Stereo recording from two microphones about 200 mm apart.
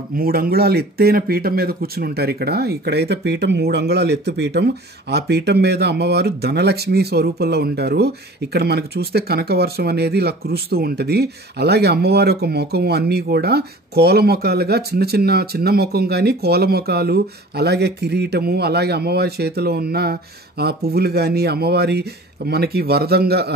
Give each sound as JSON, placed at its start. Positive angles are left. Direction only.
{"t": 0.2, "sound": "speech", "side_deg": -50}